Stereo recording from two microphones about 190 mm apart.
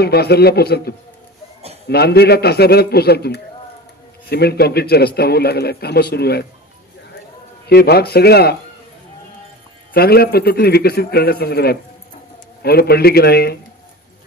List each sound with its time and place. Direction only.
0.0 s a man's voice: 55° left (ahead or behind)
7.6 s a man's voice: 55° left (ahead or behind)
9.9 s a man's voice: 55° left (ahead or behind)